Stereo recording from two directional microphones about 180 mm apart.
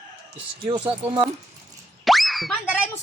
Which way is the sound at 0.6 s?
25° right (ahead or behind).